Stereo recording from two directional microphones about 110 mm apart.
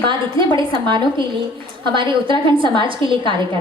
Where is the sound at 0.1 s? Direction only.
45° right (ahead or behind).